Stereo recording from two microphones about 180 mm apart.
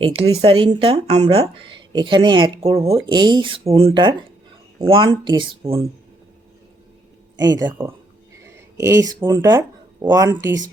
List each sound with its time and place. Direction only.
0.0 s speech: 35° right (ahead or behind)
7.4 s speech: 25° right (ahead or behind)
8.8 s speech: 20° right (ahead or behind)